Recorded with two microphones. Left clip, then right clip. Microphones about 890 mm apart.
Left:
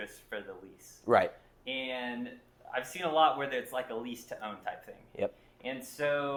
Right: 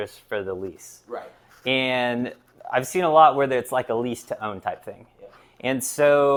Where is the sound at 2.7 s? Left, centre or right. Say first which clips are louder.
Right 13 dB; right.